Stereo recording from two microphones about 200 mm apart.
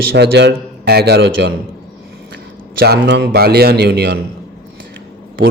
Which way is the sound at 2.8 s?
55° right (ahead or behind).